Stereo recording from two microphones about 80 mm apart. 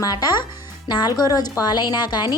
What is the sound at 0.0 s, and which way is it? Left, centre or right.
A woman's voice, left.